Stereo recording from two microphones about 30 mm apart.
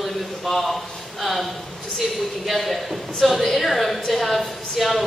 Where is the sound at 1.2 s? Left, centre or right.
Centre.